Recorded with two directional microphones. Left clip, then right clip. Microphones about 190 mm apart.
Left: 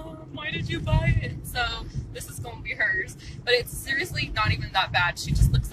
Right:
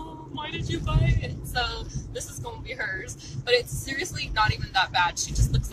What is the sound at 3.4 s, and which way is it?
Speech, 15° right (ahead or behind).